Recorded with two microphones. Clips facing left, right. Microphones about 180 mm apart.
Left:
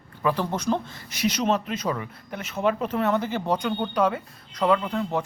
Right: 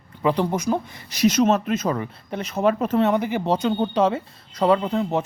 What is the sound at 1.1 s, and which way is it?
Speech, 40° right (ahead or behind).